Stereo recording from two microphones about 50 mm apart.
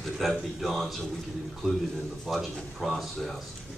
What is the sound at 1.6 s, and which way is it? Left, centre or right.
Speech, centre.